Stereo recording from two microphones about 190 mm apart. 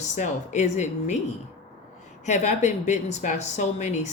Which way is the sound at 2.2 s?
40° left (ahead or behind).